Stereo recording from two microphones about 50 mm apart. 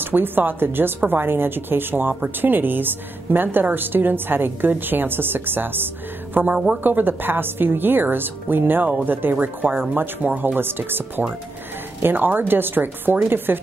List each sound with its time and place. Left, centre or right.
0.0 s a woman's voice: right